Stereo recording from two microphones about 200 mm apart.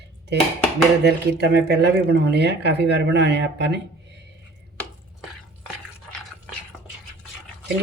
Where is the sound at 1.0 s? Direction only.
55° right (ahead or behind).